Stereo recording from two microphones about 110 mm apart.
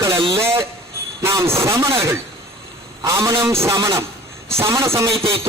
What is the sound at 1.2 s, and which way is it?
Speech, 25° right (ahead or behind).